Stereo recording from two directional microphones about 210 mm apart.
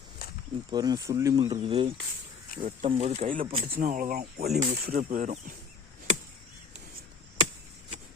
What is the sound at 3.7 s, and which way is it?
Speech, 40° right (ahead or behind).